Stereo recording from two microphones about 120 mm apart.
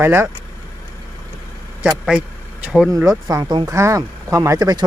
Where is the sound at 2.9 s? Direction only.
30° right (ahead or behind).